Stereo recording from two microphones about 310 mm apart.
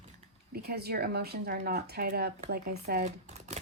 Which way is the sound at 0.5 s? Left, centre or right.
Right.